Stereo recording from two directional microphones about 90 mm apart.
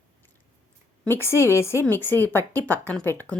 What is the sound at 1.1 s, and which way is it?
A woman's voice, 30° left (ahead or behind).